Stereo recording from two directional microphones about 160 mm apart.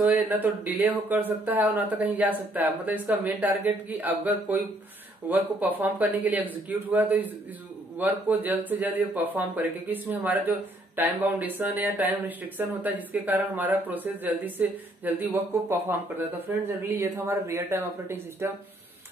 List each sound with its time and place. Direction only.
0.0 s speech: 10° right (ahead or behind)